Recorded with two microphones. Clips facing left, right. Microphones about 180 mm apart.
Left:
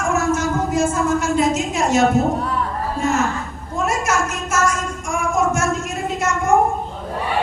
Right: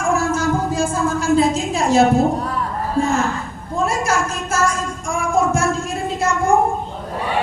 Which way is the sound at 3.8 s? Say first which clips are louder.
Right 1 dB; 30° right (ahead or behind).